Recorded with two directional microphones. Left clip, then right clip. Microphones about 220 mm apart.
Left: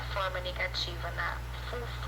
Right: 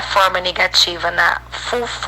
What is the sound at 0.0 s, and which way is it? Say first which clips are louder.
A woman's voice: right 19 dB; 45° right (ahead or behind).